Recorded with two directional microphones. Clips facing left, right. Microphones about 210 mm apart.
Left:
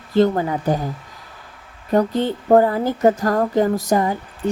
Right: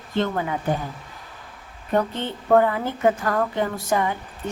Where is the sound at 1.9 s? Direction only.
35° left (ahead or behind).